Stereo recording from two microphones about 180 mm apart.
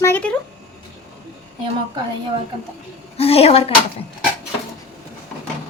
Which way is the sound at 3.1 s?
35° left (ahead or behind).